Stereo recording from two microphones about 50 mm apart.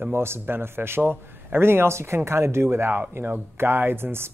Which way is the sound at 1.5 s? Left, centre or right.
Right.